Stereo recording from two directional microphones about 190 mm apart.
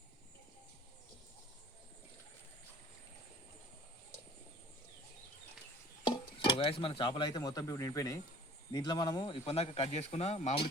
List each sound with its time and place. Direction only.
6.0 s speech: 25° left (ahead or behind)